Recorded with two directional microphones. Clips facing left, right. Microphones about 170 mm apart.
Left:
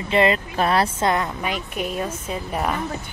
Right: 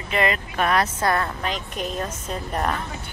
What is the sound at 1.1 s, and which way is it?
A woman's voice, 15° left (ahead or behind).